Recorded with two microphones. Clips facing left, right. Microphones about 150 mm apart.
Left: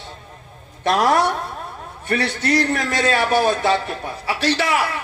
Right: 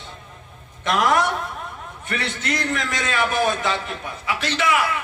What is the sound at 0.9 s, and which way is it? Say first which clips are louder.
A man's voice: left 3 dB; 30° left (ahead or behind).